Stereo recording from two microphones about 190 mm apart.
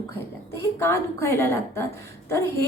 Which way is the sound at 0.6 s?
15° left (ahead or behind).